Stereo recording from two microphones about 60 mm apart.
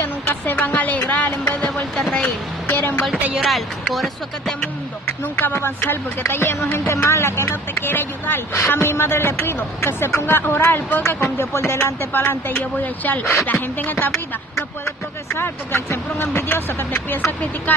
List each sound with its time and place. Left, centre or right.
0.0 s a sound: left; by 2.3 s centre
2.7 s a woman's voice: left
3.3 s speech: centre
5.0 s speech: left
15.3 s speech: left